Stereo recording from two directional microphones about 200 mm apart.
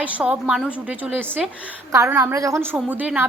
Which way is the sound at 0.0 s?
5° right (ahead or behind).